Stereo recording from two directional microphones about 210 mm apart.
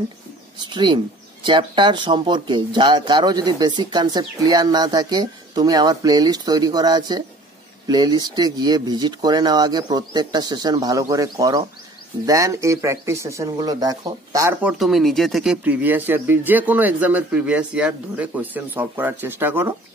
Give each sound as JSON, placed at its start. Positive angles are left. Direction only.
{"t": 0.7, "sound": "speech", "side_deg": -20}